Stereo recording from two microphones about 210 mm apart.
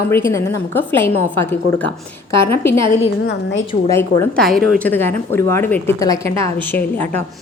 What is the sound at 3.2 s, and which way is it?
Speech, 60° left (ahead or behind).